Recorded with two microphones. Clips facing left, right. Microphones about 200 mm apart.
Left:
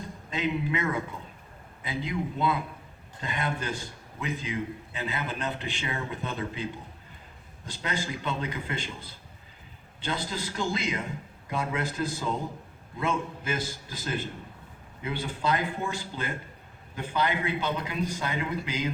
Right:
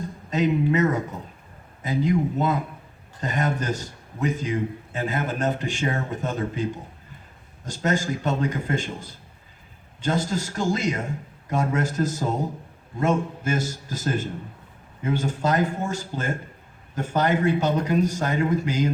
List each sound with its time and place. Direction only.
0.3 s a man's voice: 40° right (ahead or behind)